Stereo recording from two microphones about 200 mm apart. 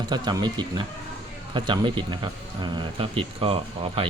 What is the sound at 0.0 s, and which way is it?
Speech, 20° right (ahead or behind).